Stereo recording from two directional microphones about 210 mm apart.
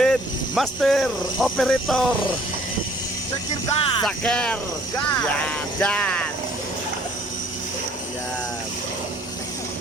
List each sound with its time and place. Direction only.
0.0 s speech: centre (ahead or behind)
3.8 s music: 25° left (ahead or behind)
4.0 s speech: 5° left (ahead or behind)